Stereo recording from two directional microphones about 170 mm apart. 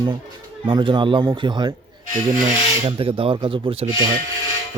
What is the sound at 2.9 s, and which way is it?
Speech, 30° right (ahead or behind).